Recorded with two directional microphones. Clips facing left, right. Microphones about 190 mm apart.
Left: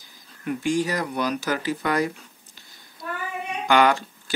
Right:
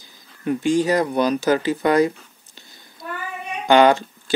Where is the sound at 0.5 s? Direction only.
25° right (ahead or behind).